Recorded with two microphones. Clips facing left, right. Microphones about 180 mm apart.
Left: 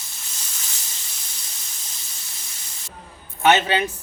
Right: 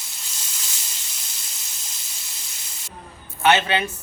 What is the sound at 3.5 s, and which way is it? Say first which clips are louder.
Speech: left 1 dB; 20° left (ahead or behind).